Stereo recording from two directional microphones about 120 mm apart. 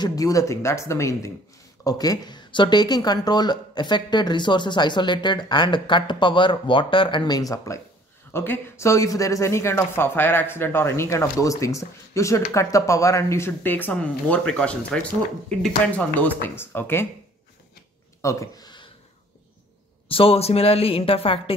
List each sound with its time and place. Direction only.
0.0 s speech: 30° left (ahead or behind); by 15.0 s 10° left (ahead or behind)
16.2 s speech: 15° left (ahead or behind)
18.2 s a sound: 30° left (ahead or behind)
20.1 s a woman's voice: 50° left (ahead or behind)